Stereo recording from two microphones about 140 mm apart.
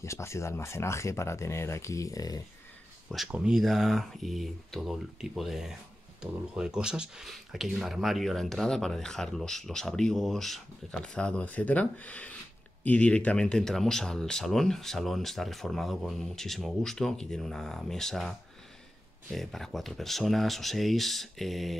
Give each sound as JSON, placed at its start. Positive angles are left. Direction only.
{"t": 0.0, "sound": "speech", "side_deg": 20}
{"t": 3.1, "sound": "speech", "side_deg": -5}
{"t": 19.3, "sound": "speech", "side_deg": 0}